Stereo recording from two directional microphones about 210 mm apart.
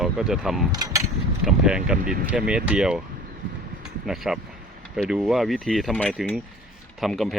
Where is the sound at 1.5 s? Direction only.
5° right (ahead or behind).